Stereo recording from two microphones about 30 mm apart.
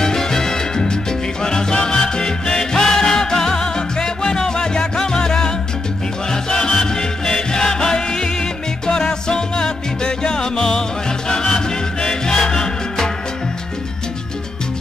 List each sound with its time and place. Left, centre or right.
0.0 s music: centre
6.5 s music: left